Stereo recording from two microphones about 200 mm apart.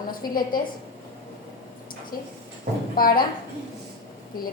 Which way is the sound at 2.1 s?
45° left (ahead or behind).